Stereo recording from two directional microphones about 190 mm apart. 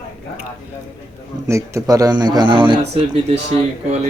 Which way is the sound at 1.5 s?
15° right (ahead or behind).